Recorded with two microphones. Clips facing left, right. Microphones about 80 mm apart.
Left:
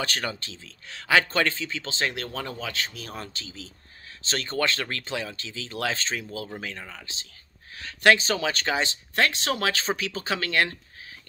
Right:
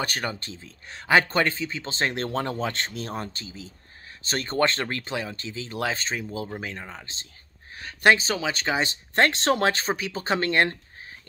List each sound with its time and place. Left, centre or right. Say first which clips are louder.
0.0 s speech: right 1 dB; centre
2.2 s speech: right 6 dB; right
3.1 s speech: right 4 dB; right
8.3 s speech: even; centre
9.4 s speech: right 5 dB; right
9.9 s speech: right 3 dB; right